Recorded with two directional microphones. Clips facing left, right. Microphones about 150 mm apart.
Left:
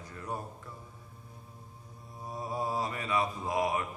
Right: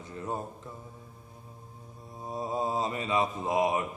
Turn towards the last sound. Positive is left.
turn(degrees=-20)  # may be behind; listen again after turning